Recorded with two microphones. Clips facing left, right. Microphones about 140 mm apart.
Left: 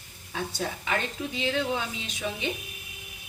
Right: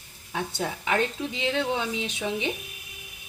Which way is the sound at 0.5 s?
20° right (ahead or behind).